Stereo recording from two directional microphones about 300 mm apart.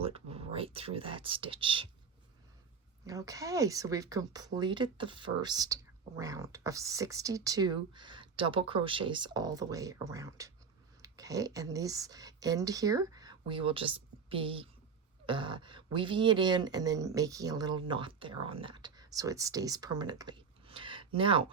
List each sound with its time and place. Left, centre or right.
0.0 s speech: centre
3.1 s speech: centre